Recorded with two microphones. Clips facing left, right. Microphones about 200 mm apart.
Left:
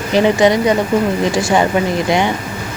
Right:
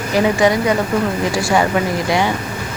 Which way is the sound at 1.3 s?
20° left (ahead or behind).